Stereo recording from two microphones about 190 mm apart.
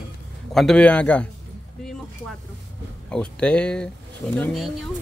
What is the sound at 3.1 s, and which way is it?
Speech, 5° left (ahead or behind).